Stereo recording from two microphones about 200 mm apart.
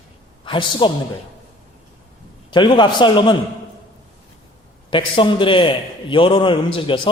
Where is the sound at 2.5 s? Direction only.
25° left (ahead or behind).